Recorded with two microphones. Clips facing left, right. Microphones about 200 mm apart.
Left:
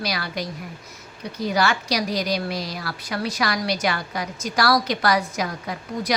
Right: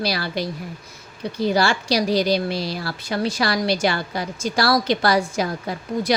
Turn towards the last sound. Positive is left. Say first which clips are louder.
# right 4 dB
turn(degrees=-30)  # may be behind; listen again after turning